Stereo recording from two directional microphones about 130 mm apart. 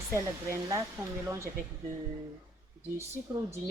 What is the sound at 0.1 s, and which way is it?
Speech, 20° right (ahead or behind).